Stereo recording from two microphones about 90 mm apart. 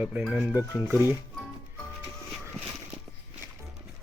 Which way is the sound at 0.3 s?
5° right (ahead or behind).